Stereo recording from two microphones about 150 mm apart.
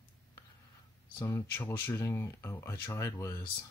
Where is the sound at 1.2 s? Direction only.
15° left (ahead or behind).